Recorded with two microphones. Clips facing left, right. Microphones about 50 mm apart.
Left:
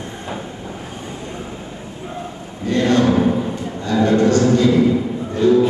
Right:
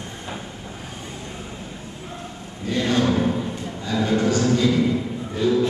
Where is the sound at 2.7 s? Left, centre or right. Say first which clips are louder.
Left 6 dB; centre.